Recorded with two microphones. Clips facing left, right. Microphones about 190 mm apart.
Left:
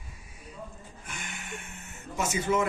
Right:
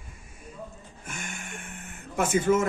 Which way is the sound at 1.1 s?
50° right (ahead or behind).